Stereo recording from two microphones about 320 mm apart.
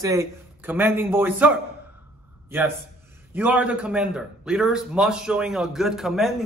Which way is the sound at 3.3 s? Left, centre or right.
Centre.